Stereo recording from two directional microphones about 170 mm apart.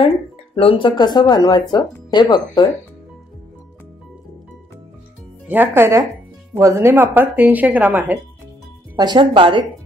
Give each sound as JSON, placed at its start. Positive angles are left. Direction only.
{"t": 0.6, "sound": "speech", "side_deg": 30}
{"t": 5.5, "sound": "speech", "side_deg": -15}
{"t": 8.9, "sound": "speech", "side_deg": -25}